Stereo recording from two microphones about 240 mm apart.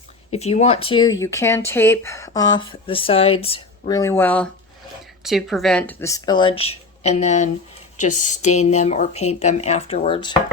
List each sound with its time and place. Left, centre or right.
0.3 s speech: left